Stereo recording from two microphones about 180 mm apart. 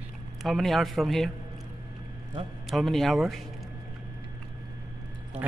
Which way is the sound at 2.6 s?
Centre (ahead or behind).